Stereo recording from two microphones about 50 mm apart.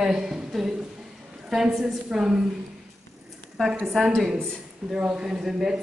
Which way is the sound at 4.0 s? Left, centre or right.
Centre.